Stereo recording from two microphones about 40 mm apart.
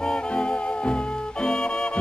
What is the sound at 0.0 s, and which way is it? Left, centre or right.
Music, left.